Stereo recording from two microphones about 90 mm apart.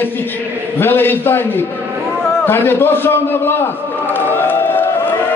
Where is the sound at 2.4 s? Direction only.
25° left (ahead or behind).